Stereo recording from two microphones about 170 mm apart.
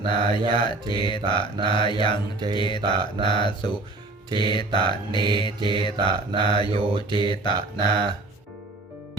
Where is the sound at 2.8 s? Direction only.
25° right (ahead or behind).